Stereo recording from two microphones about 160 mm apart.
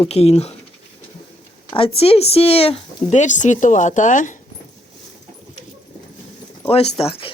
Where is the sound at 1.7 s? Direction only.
35° left (ahead or behind); by 4.4 s 50° left (ahead or behind).